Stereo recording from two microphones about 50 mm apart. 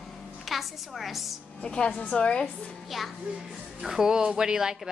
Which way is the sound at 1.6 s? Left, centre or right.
Centre.